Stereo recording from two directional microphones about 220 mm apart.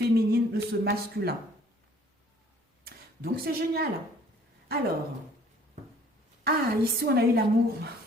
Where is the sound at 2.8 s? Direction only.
45° right (ahead or behind).